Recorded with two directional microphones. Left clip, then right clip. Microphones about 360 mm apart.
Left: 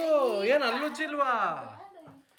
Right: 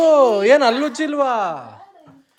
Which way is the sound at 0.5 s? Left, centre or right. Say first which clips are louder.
Right 11 dB; centre.